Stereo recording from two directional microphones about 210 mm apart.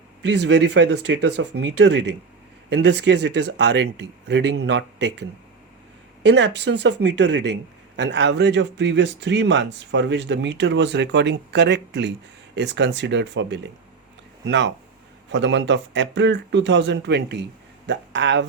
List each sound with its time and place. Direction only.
0.2 s a man's voice: 55° right (ahead or behind)
6.2 s a man's voice: 55° right (ahead or behind)